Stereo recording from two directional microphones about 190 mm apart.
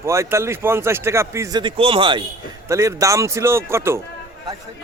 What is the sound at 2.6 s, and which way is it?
A man's voice, 15° right (ahead or behind).